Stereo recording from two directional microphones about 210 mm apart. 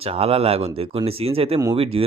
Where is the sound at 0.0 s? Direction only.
30° right (ahead or behind).